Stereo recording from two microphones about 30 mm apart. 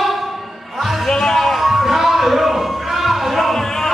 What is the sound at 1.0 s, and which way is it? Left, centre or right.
Music, centre.